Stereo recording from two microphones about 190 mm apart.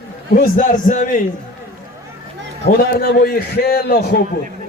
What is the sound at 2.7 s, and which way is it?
A man's voice, 50° left (ahead or behind).